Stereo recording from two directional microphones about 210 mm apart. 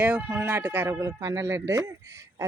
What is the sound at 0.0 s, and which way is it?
Speech, 10° right (ahead or behind).